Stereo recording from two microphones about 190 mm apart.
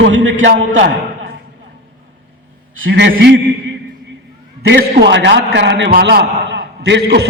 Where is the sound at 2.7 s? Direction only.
80° right.